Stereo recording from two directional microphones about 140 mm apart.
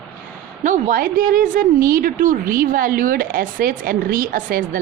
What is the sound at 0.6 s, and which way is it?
A woman's voice, 70° right (ahead or behind).